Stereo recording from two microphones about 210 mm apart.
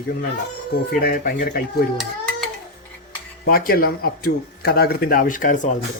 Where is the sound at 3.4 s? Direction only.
45° left (ahead or behind).